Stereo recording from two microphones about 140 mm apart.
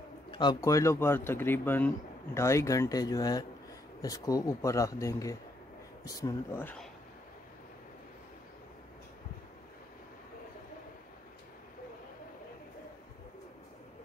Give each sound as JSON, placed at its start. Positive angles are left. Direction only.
{"t": 0.3, "sound": "bird", "side_deg": 30}
{"t": 0.6, "sound": "speech", "side_deg": 20}